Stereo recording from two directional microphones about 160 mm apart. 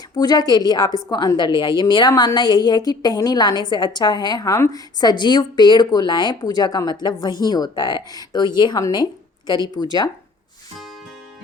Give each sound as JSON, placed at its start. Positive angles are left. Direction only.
{"t": 0.1, "sound": "a woman's voice", "side_deg": 25}